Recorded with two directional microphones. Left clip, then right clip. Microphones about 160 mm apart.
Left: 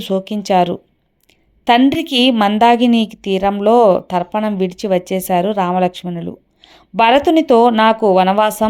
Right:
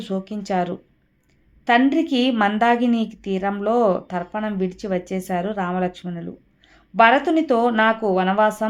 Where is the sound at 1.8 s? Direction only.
35° left (ahead or behind).